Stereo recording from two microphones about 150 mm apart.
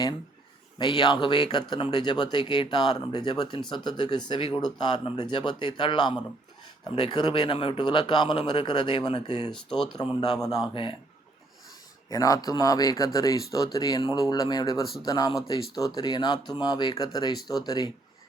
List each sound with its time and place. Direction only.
0.8 s speech: 30° left (ahead or behind)
9.6 s speech: 5° left (ahead or behind)
10.2 s speech: 25° left (ahead or behind)
12.0 s speech: 25° left (ahead or behind)